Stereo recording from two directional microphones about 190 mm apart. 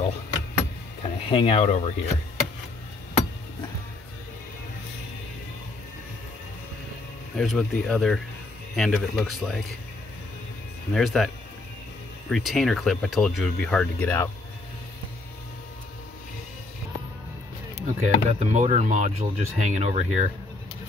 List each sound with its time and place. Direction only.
1.0 s speech: 30° left (ahead or behind)
7.3 s speech: 5° left (ahead or behind)
10.9 s speech: centre (ahead or behind)
17.8 s speech: 40° right (ahead or behind)